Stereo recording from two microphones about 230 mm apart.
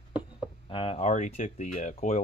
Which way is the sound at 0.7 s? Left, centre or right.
Left.